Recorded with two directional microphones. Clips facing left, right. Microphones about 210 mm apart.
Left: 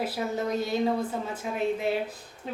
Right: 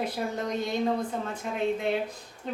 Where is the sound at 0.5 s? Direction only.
5° left (ahead or behind).